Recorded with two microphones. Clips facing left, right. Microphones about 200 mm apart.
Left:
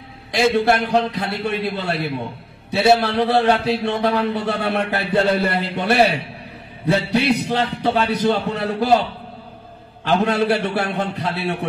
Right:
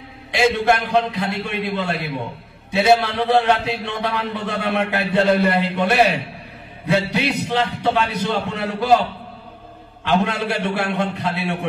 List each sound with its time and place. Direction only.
0.3 s a man's voice: 35° left (ahead or behind)
10.0 s a man's voice: 35° left (ahead or behind)